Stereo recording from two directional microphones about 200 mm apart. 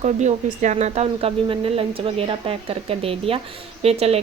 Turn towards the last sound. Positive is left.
turn(degrees=-30)  # may be behind; listen again after turning